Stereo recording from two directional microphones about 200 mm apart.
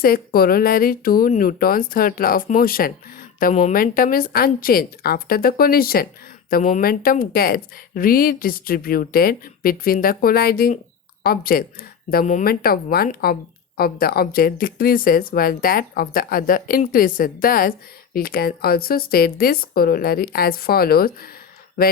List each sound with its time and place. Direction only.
0.0 s a woman's voice: 50° left (ahead or behind)